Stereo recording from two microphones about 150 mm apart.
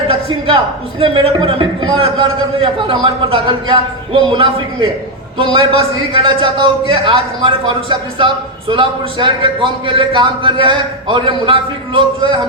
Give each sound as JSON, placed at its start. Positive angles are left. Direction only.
{"t": 0.9, "sound": "a man's voice", "side_deg": -35}